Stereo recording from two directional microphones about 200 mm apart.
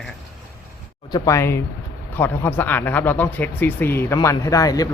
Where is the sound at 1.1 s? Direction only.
15° left (ahead or behind).